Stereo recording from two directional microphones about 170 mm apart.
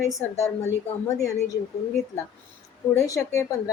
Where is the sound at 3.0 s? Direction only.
15° left (ahead or behind).